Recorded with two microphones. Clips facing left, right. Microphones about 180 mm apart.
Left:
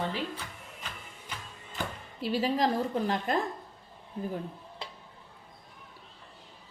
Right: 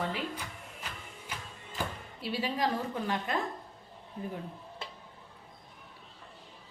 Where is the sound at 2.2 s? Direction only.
40° left (ahead or behind).